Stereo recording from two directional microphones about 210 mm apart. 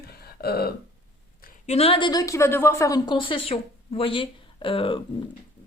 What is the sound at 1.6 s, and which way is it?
A woman's voice, 30° left (ahead or behind).